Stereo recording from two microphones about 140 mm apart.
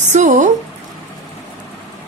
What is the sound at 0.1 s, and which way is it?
Speech, 60° right (ahead or behind).